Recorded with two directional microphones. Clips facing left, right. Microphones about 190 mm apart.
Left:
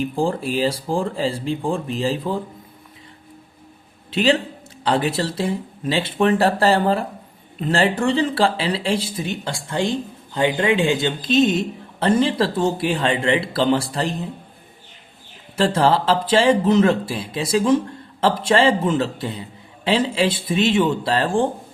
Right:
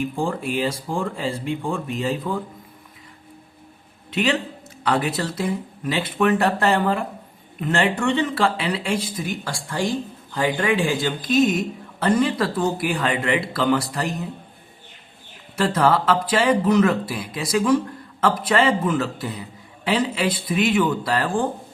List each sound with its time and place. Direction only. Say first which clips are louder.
0.0 s speech: left 3 dB; 30° left (ahead or behind)
4.1 s speech: left 4 dB; 30° left (ahead or behind)
15.5 s speech: left 2 dB; 25° left (ahead or behind)